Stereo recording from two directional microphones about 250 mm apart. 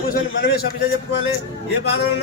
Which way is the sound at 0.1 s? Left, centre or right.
Left.